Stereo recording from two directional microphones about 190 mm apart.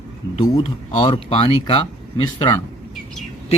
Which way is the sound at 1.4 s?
30° left (ahead or behind).